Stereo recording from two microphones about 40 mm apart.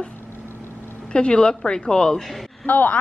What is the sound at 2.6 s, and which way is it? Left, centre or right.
Speech, left.